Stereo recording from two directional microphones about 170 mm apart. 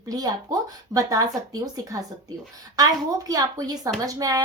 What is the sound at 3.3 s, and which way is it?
Speech, 20° right (ahead or behind).